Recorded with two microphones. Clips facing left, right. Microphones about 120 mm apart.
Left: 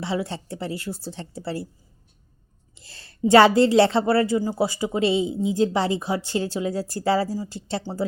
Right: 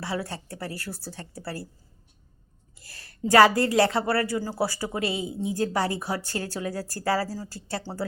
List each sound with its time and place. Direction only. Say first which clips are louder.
0.0 s a woman's voice: left 4 dB; 25° left (ahead or behind)
2.7 s a woman's voice: left 1 dB; 25° left (ahead or behind)